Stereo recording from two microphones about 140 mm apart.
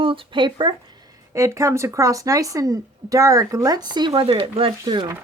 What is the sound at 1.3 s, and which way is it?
A woman's voice, 20° right (ahead or behind).